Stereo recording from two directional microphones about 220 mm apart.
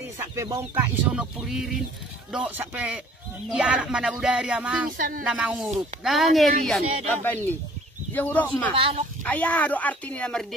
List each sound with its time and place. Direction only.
0.2 s speech: 15° right (ahead or behind)
4.9 s a sound: 40° right (ahead or behind)
5.2 s speech: 5° right (ahead or behind)